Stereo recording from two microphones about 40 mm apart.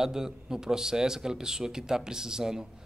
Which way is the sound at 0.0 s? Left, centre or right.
Centre.